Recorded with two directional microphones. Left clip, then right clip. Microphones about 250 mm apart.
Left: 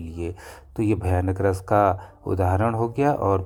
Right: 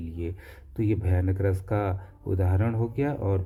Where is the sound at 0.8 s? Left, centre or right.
Centre.